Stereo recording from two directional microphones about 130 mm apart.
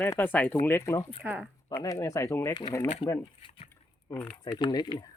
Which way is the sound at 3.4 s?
45° left (ahead or behind).